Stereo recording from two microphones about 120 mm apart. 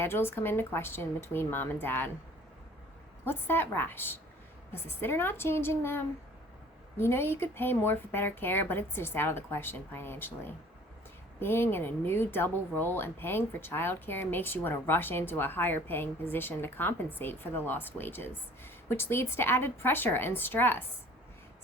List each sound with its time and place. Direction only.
0.0 s speech: 20° left (ahead or behind)
3.2 s speech: 20° left (ahead or behind)